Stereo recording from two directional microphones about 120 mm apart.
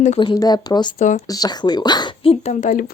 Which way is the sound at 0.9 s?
90° left.